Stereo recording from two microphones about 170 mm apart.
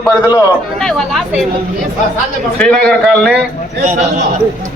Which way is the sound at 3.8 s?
50° right (ahead or behind).